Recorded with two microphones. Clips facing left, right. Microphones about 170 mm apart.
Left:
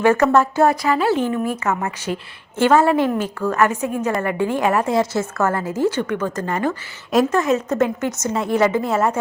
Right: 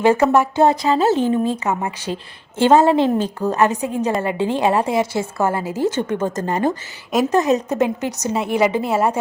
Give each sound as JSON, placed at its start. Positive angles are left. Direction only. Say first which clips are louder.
{"t": 0.0, "sound": "a woman's voice", "louder": "even", "side_deg": -15}
{"t": 0.5, "sound": "a woman's voice", "louder": "right 1 dB", "side_deg": -25}